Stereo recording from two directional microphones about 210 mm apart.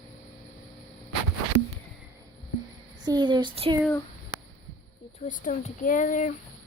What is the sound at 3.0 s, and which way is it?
Speech, 20° right (ahead or behind).